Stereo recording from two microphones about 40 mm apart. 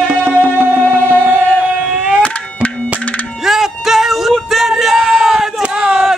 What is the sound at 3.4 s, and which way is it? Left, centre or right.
Music, centre.